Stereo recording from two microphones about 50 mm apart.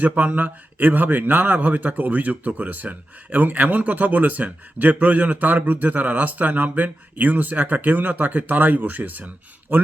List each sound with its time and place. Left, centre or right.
0.0 s a man's voice: right